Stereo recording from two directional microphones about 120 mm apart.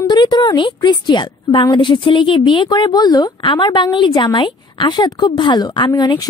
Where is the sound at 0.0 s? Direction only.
35° left (ahead or behind).